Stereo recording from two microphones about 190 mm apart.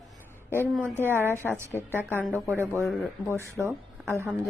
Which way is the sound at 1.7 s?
Centre (ahead or behind).